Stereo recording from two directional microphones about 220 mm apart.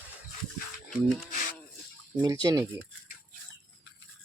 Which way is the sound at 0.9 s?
Centre (ahead or behind).